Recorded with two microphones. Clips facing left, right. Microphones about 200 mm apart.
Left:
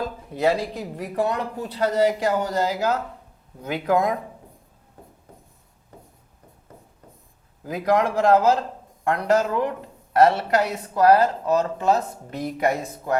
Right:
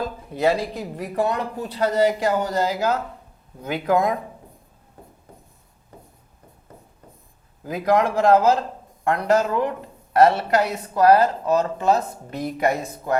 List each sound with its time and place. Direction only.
0.0 s a sound: 25° right (ahead or behind)
0.8 s a man's voice: 20° right (ahead or behind)
1.8 s a man's voice: 20° right (ahead or behind)
7.7 s a man's voice: 20° right (ahead or behind)